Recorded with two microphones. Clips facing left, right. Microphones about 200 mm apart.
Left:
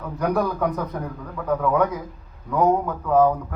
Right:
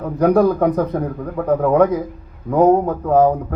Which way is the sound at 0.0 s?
35° right (ahead or behind).